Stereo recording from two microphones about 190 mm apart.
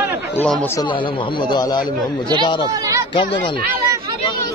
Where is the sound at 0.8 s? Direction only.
25° left (ahead or behind).